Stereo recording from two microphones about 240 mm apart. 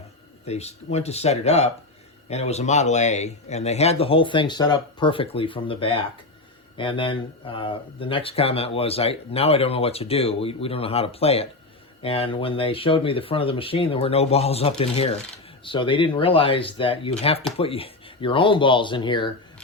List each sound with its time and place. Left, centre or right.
0.4 s speech: left